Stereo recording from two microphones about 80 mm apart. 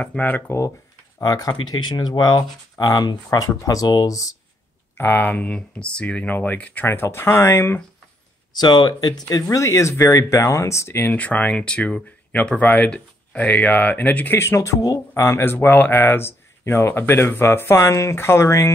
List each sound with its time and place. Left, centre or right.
0.0 s speech: centre
1.2 s speech: left
1.5 s speech: left
4.9 s speech: left
6.9 s speech: left
8.5 s speech: left
9.3 s speech: left